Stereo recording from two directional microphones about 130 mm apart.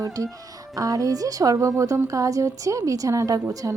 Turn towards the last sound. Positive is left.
turn(degrees=-25)  # may be behind; listen again after turning